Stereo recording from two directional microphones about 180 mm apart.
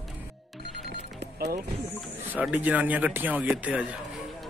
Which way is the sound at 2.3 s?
10° right (ahead or behind).